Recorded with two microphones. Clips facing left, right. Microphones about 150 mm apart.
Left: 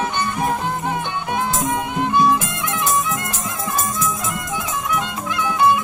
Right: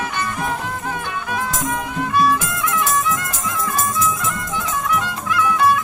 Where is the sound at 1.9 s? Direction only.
25° left (ahead or behind).